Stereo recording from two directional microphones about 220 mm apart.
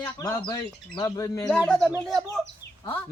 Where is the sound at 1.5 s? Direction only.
5° left (ahead or behind).